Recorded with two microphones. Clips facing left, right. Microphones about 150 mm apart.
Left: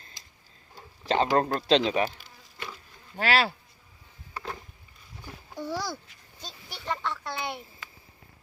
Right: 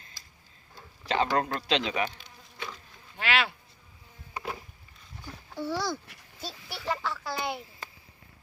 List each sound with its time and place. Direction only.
0.2 s tick-tock: 20° left (ahead or behind)
1.0 s speech: 35° left (ahead or behind)
2.0 s insect: 5° left (ahead or behind)
3.2 s speech: 35° left (ahead or behind)
4.4 s music: 10° right (ahead or behind)
5.5 s speech: 15° left (ahead or behind)
6.4 s a sound: 5° right (ahead or behind)